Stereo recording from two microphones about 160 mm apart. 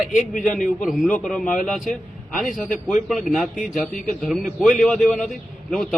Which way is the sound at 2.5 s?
55° left (ahead or behind).